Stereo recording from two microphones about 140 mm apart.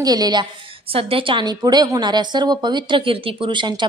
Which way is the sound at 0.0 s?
30° right (ahead or behind).